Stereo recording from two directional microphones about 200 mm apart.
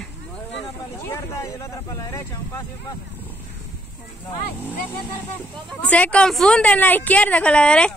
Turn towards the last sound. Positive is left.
turn(degrees=5)  # may be behind; listen again after turning